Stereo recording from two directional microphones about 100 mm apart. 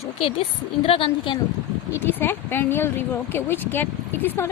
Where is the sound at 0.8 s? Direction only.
65° left (ahead or behind).